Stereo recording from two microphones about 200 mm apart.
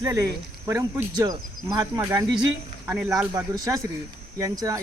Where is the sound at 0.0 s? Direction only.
15° right (ahead or behind).